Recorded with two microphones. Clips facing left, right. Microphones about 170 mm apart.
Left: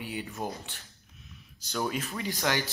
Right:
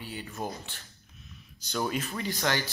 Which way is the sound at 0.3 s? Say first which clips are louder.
Even; 10° left (ahead or behind).